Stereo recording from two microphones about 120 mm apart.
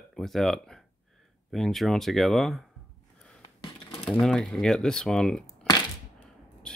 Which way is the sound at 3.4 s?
40° left (ahead or behind).